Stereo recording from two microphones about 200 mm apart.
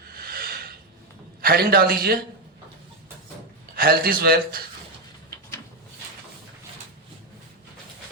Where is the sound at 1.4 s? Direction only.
50° right (ahead or behind).